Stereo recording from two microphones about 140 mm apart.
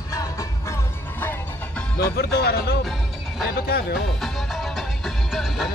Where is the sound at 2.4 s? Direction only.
90° left.